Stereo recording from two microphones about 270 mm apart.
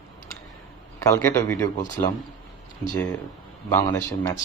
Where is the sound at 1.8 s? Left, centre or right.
Left.